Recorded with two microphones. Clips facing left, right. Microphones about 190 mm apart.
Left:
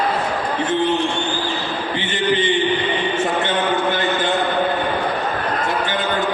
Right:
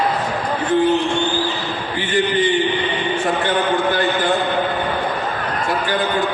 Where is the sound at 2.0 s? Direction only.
20° left (ahead or behind).